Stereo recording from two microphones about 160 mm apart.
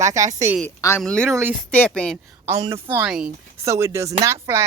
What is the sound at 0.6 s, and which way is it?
Speech, 15° left (ahead or behind).